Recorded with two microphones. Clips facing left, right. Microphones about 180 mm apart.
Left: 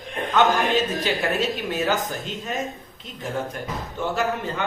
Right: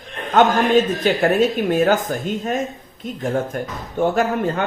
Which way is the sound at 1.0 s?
50° right (ahead or behind).